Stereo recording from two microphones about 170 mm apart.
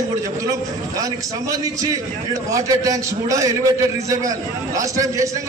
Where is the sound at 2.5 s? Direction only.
20° right (ahead or behind).